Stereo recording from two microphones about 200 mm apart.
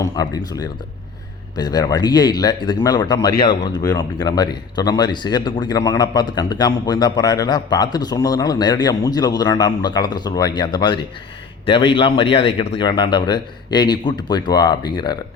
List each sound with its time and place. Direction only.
0.0 s speech: 20° left (ahead or behind)